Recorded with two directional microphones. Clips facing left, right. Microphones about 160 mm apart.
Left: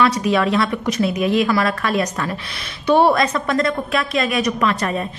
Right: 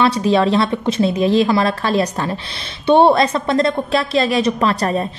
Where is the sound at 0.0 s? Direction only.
30° right (ahead or behind).